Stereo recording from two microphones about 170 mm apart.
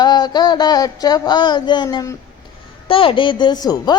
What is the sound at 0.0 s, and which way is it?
A woman's voice, 25° left (ahead or behind).